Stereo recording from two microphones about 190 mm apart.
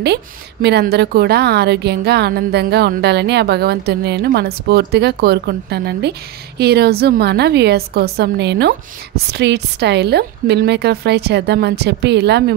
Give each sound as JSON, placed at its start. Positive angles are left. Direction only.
{"t": 0.0, "sound": "a woman's voice", "side_deg": -60}